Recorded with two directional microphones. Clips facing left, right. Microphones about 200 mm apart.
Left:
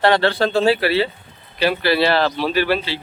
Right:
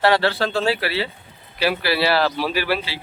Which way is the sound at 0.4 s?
30° left (ahead or behind).